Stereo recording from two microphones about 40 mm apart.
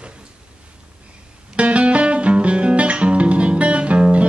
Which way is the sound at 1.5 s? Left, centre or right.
Right.